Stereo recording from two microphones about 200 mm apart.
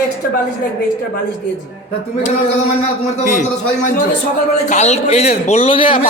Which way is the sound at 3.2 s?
40° left (ahead or behind).